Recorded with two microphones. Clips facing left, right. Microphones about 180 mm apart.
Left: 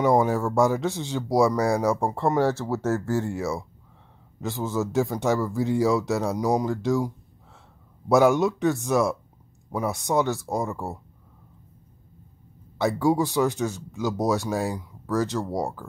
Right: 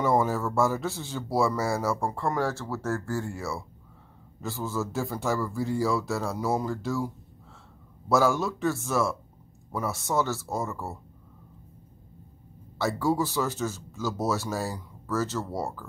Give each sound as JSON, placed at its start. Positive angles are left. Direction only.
{"t": 0.0, "sound": "a man's voice", "side_deg": 15}
{"t": 8.1, "sound": "a man's voice", "side_deg": 20}
{"t": 12.7, "sound": "speech", "side_deg": 15}